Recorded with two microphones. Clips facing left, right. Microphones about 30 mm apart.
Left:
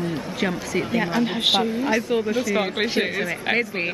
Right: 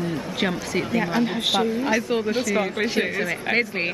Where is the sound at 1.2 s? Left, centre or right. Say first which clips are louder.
Left 2 dB; centre.